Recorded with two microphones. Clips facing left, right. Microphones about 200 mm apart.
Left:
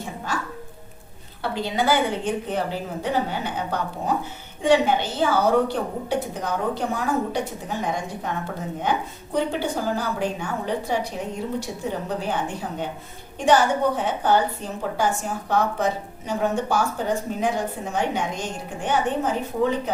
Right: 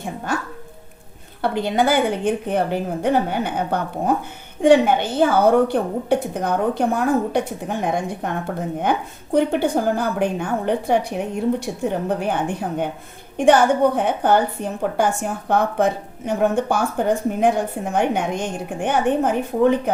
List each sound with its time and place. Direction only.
1.4 s a woman's voice: 55° right (ahead or behind)